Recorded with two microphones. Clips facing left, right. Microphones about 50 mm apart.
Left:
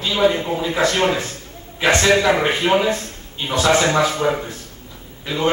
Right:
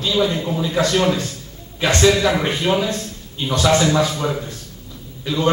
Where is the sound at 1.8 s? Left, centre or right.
Left.